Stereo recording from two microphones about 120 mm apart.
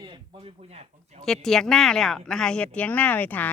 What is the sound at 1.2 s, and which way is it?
Speech, 5° left (ahead or behind).